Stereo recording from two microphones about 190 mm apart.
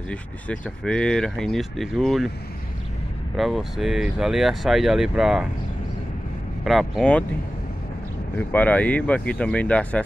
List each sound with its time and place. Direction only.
0.1 s speech: 5° left (ahead or behind)
3.3 s speech: centre (ahead or behind)
6.6 s speech: centre (ahead or behind)
8.4 s speech: 10° left (ahead or behind)